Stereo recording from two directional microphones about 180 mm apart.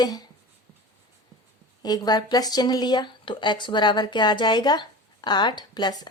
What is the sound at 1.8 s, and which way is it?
Speech, 20° left (ahead or behind).